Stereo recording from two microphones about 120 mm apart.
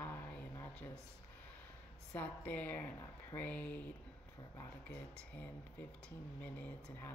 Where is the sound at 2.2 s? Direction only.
15° left (ahead or behind).